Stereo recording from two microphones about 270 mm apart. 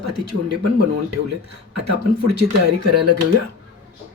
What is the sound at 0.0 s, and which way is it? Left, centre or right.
Speech, right.